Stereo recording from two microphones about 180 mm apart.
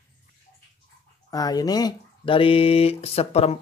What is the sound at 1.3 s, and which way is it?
Speech, 20° left (ahead or behind).